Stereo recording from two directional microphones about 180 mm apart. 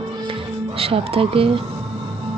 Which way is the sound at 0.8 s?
30° right (ahead or behind).